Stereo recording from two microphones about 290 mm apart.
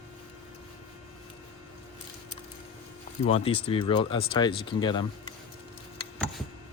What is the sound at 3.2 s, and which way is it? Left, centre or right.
Speech, centre.